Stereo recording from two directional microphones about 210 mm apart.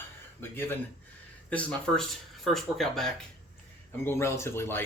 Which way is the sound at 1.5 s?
5° left (ahead or behind).